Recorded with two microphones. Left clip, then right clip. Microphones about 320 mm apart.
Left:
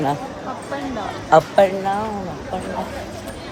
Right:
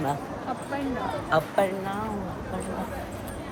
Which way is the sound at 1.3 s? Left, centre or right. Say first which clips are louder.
Left 12 dB; centre.